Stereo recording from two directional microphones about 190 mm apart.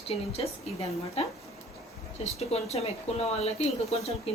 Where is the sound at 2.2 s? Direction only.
35° left (ahead or behind).